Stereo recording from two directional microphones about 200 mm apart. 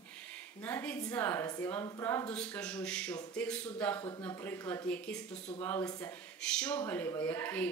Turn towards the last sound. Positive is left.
turn(degrees=10)  # may be behind; listen again after turning